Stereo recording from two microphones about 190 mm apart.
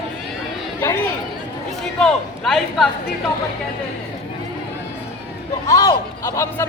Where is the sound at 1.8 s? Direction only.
5° left (ahead or behind).